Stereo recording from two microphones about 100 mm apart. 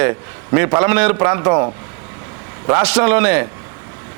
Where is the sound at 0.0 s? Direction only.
25° right (ahead or behind).